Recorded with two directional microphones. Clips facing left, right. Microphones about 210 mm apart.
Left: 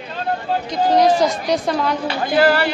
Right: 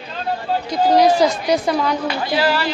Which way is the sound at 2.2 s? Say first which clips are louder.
Left 6 dB; 55° left (ahead or behind).